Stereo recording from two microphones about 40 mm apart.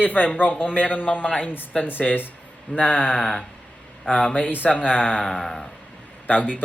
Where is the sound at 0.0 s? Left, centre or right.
Left.